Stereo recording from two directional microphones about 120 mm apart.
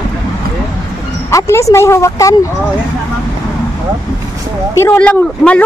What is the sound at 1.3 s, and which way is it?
A woman's voice, 25° left (ahead or behind).